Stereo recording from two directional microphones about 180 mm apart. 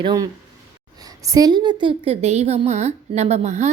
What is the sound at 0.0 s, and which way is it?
A woman's voice, 25° right (ahead or behind).